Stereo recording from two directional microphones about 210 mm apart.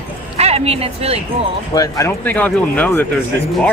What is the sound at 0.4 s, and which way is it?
Speech, 30° right (ahead or behind).